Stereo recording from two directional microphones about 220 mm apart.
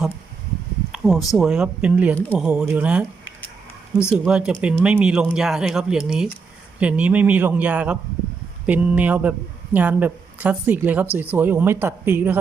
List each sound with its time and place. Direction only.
0.9 s a sound: centre (ahead or behind)
1.4 s speech: 5° right (ahead or behind)
2.1 s speech: 5° left (ahead or behind)
2.5 s speech: 5° right (ahead or behind)
4.1 s a woman's voice: centre (ahead or behind)